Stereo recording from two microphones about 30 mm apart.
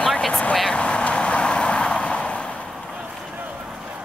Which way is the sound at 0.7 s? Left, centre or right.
Left.